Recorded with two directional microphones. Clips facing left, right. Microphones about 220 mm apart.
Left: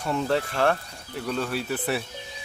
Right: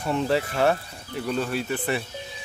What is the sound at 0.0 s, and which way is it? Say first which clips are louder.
Speech: right 1 dB; 5° right (ahead or behind).